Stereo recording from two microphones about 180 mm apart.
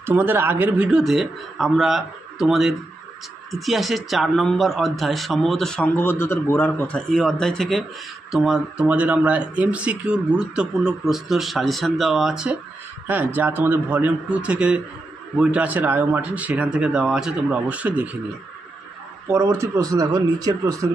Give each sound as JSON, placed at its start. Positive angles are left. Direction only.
{"t": 0.0, "sound": "a man's voice", "side_deg": -10}
{"t": 19.2, "sound": "speech", "side_deg": -15}